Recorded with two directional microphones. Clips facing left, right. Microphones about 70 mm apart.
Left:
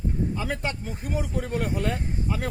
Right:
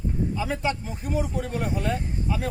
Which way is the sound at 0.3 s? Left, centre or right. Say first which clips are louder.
Right 3 dB; left.